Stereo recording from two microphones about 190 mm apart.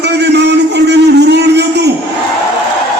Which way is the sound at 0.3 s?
65° right (ahead or behind).